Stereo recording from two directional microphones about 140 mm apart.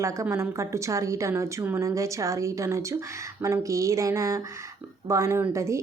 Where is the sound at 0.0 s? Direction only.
20° right (ahead or behind).